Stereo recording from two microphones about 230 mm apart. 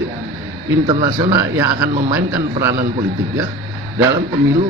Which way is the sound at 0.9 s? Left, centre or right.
Right.